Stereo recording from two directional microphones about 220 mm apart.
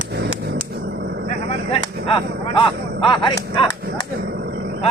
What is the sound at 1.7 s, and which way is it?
Speech, 25° left (ahead or behind).